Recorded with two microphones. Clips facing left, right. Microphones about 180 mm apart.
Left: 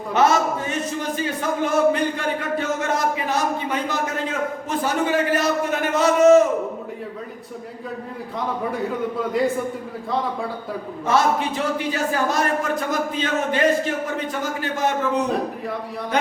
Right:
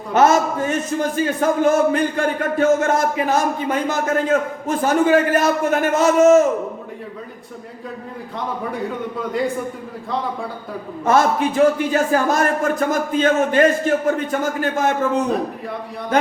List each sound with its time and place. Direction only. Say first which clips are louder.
0.1 s a man's voice: right 3 dB; 50° right (ahead or behind)
11.0 s a man's voice: right 4 dB; 50° right (ahead or behind)